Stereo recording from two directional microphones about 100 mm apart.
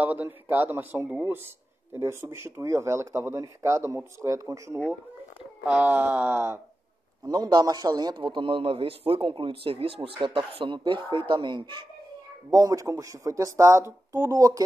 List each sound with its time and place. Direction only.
0.0 s speech: 15° right (ahead or behind)
5.7 s speech: 15° right (ahead or behind)
7.2 s speech: 45° right (ahead or behind)
8.2 s speech: 55° right (ahead or behind)
12.4 s speech: 35° right (ahead or behind)